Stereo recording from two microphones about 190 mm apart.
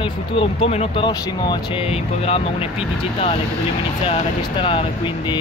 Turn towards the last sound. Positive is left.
turn(degrees=25)  # may be behind; listen again after turning